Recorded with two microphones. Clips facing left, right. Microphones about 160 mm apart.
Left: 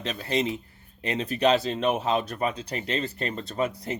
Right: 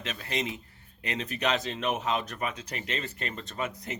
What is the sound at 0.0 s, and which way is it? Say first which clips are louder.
Speech: left 6 dB; 35° left (ahead or behind).